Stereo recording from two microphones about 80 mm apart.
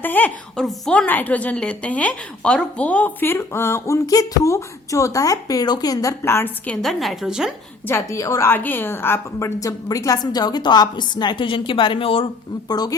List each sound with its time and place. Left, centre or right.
0.0 s a woman's voice: left
0.5 s a woman's voice: centre
1.0 s a woman's voice: left
6.2 s a woman's voice: left
6.8 s a woman's voice: centre
7.9 s a woman's voice: left
8.4 s a woman's voice: left
9.6 s a woman's voice: left